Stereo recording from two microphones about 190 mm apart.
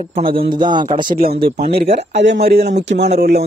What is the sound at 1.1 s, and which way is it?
A man's voice, 50° right (ahead or behind).